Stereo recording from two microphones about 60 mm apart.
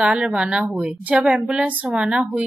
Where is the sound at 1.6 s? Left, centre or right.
Centre.